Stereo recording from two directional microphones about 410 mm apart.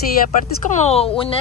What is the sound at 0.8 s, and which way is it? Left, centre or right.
Speech, centre.